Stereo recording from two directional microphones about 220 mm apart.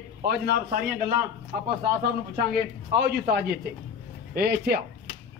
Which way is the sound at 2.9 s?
45° right (ahead or behind).